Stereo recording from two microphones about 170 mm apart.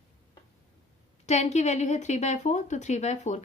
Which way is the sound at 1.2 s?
40° left (ahead or behind).